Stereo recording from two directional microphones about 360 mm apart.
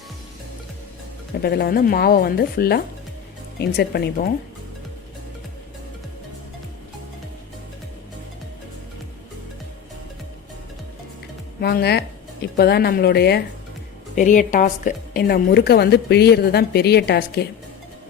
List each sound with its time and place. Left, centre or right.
1.4 s a woman's voice: left
11.6 s a woman's voice: left